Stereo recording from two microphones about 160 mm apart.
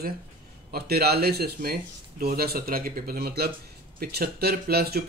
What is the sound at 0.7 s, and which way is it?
Speech, 70° right (ahead or behind).